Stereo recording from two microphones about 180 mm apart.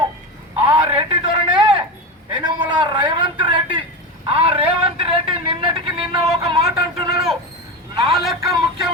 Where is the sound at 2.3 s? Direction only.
25° right (ahead or behind).